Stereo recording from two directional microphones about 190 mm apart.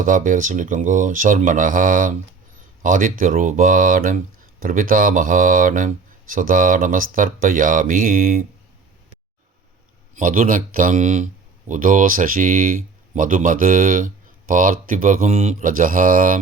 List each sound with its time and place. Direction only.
0.0 s speech: 45° right (ahead or behind)
10.2 s speech: 45° right (ahead or behind)